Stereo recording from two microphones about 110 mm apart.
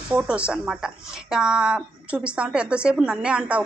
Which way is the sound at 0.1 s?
10° right (ahead or behind).